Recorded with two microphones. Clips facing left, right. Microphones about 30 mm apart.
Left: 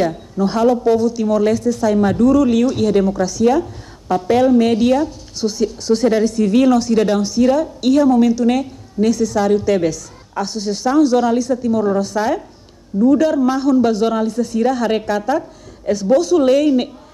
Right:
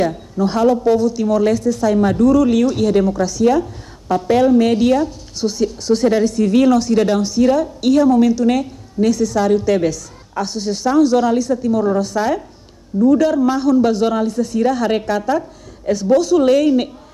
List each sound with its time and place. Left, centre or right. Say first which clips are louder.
0.1 s speech: even; centre